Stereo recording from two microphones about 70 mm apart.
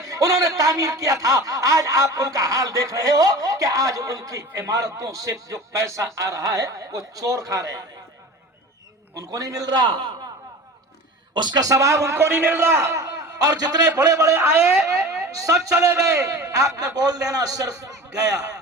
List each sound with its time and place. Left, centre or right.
0.0 s a man's voice: right
9.1 s a man's voice: right
11.3 s speech: right
13.0 s a man's voice: right
14.8 s speech: right